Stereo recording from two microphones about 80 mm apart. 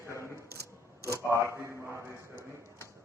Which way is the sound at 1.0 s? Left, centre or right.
Right.